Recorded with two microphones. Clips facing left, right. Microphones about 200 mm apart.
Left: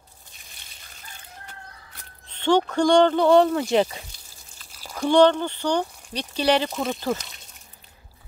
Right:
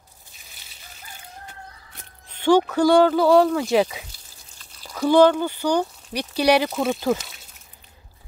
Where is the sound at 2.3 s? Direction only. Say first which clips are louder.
Right 3 dB; 10° right (ahead or behind).